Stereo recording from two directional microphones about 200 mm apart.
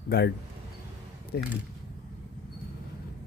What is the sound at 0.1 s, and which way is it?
Speech, 50° left (ahead or behind).